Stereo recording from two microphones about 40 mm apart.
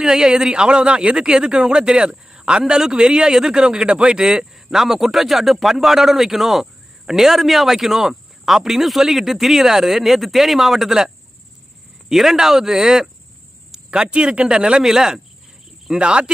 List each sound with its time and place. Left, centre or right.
0.0 s a man's voice: centre
4.3 s a man's voice: centre
12.1 s a man's voice: centre
13.8 s a man's voice: right
14.5 s a man's voice: centre
15.9 s a man's voice: right